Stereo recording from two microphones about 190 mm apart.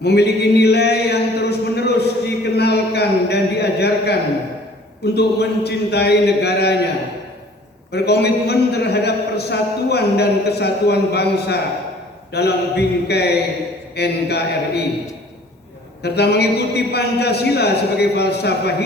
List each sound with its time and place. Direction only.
0.0 s a sound: 60° left (ahead or behind)
5.1 s a man's voice: 60° left (ahead or behind)
7.9 s a man's voice: 60° left (ahead or behind)
16.0 s a man's voice: 60° left (ahead or behind)